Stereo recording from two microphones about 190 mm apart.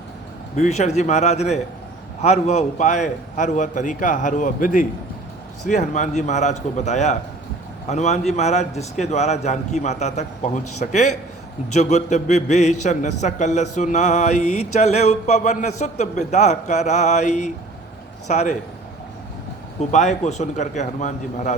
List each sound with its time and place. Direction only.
0.5 s a man's voice: 35° left (ahead or behind)
19.9 s a man's voice: 40° left (ahead or behind)